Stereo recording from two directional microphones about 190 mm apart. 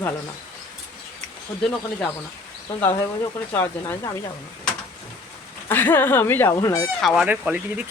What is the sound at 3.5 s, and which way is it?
Speech, 10° left (ahead or behind).